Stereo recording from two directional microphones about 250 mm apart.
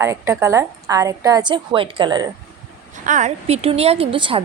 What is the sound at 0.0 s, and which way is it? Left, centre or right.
A woman's voice, centre.